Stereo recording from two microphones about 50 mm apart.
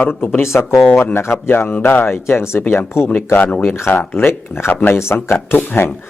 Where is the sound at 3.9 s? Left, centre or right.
Left.